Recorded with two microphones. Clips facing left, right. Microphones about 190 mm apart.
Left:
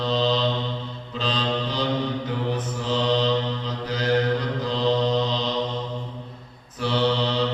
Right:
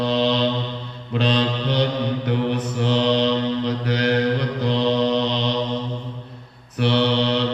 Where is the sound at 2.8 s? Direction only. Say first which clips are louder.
Right 4 dB; 70° right (ahead or behind).